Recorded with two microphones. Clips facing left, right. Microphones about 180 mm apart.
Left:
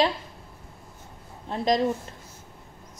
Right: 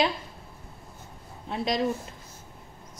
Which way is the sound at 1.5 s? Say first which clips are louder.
Left 5 dB; 5° right (ahead or behind).